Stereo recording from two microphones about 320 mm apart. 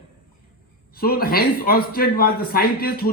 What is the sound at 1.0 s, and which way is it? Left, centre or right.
A man's voice, left.